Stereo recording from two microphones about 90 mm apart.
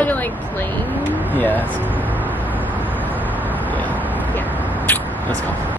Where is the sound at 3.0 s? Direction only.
20° left (ahead or behind).